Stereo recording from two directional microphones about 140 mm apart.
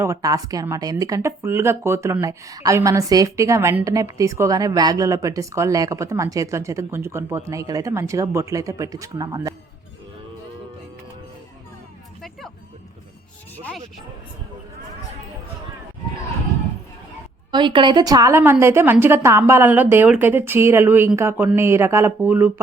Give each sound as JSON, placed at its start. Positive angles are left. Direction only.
{"t": 0.0, "sound": "a woman's voice", "side_deg": -25}
{"t": 13.6, "sound": "a sound", "side_deg": 5}
{"t": 17.5, "sound": "a woman's voice", "side_deg": -35}